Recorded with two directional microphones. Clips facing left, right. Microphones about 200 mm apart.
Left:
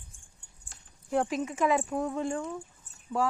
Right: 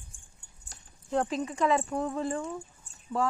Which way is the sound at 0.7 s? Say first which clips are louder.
Right 3 dB; 40° right (ahead or behind).